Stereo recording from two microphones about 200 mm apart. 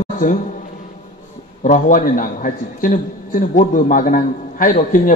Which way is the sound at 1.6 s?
40° left (ahead or behind).